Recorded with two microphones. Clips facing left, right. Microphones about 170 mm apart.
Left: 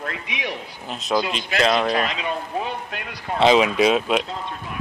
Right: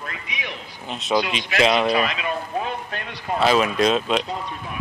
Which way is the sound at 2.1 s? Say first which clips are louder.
Even; 25° left (ahead or behind).